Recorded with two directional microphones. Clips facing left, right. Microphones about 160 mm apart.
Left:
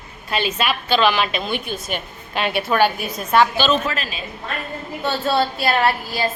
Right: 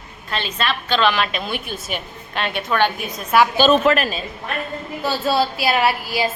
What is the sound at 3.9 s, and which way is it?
Speech, 60° right (ahead or behind).